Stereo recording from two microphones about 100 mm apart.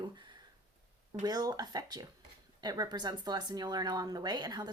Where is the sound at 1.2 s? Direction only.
40° right (ahead or behind).